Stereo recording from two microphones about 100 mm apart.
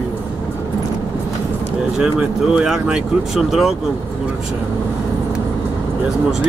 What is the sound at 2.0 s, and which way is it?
Speech, 5° right (ahead or behind).